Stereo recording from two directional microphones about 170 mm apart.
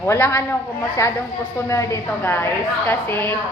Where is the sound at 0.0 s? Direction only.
15° left (ahead or behind).